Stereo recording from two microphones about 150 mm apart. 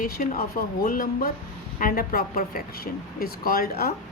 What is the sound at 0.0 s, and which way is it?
A woman's voice, 75° left (ahead or behind).